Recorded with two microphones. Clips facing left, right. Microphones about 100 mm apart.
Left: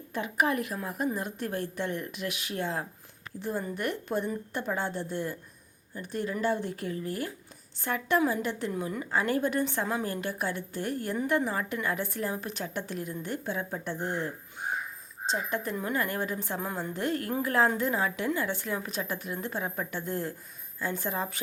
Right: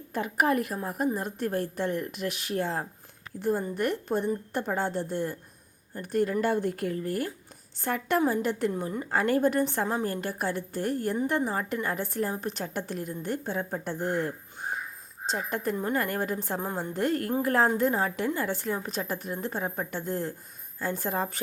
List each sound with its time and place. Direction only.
0.1 s a woman's voice: 45° right (ahead or behind)
8.7 s a woman's voice: 35° right (ahead or behind)